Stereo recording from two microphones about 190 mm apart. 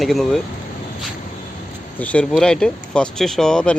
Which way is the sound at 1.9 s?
5° left (ahead or behind).